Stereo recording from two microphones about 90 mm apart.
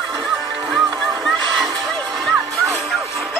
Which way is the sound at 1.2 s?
Centre (ahead or behind).